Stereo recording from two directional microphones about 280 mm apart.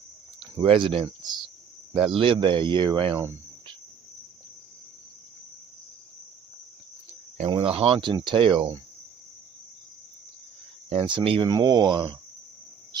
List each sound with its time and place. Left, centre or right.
0.4 s speech: centre
7.5 s speech: centre
10.9 s speech: centre